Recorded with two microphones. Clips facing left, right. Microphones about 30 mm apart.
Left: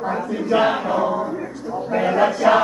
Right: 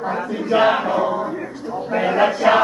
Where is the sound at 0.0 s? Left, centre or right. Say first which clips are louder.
Even; centre.